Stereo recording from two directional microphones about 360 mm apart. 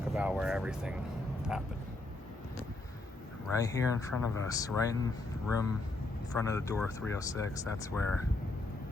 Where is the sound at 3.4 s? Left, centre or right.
Centre.